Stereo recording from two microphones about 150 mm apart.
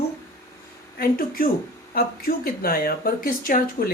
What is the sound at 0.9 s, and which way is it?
Speech, 75° left (ahead or behind).